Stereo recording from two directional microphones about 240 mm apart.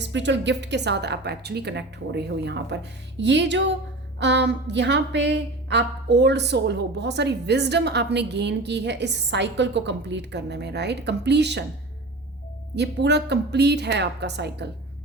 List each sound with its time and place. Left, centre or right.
0.0 s a woman's voice: right
12.7 s a woman's voice: right